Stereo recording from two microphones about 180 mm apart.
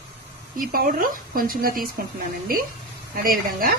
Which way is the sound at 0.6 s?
55° right (ahead or behind).